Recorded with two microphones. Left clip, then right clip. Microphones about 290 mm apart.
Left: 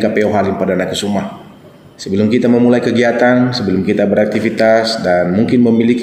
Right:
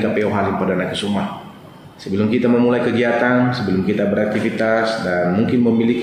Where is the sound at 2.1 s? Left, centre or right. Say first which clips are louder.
Left 4 dB; left.